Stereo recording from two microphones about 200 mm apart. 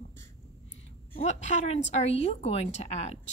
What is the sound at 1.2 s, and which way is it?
Speech, 35° left (ahead or behind).